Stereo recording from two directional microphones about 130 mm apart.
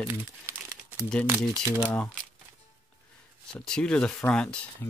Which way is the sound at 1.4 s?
30° left (ahead or behind).